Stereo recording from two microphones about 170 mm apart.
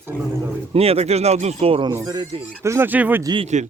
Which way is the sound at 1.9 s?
20° right (ahead or behind).